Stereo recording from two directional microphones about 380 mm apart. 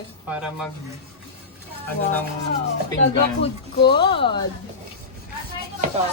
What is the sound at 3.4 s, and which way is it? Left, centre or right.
A woman's voice, centre.